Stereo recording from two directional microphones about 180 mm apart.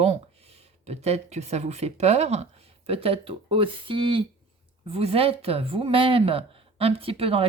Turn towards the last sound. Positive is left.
turn(degrees=-30)  # may be behind; listen again after turning